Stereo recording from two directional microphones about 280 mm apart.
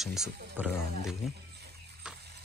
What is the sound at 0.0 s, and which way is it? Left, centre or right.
Speech, centre.